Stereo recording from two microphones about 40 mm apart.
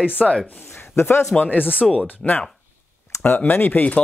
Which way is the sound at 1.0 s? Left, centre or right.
Left.